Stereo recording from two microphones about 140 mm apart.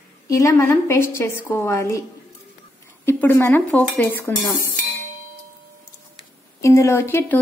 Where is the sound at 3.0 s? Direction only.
15° left (ahead or behind).